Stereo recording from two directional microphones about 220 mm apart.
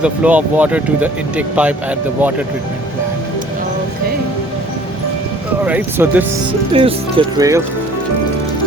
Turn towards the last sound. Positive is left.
turn(degrees=-15)  # may be behind; listen again after turning